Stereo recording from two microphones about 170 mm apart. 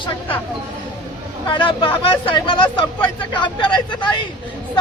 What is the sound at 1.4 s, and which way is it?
Speech, 30° left (ahead or behind).